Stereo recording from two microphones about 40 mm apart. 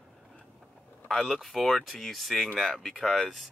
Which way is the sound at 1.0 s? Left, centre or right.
Centre.